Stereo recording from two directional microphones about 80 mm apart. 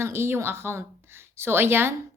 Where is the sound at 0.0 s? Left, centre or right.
Right.